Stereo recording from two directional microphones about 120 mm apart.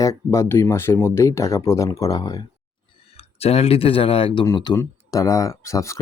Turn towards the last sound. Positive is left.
turn(degrees=25)  # may be behind; listen again after turning